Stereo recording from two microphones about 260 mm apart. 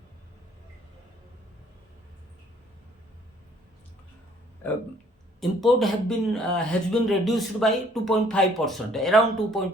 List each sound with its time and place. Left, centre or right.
5.4 s speech: centre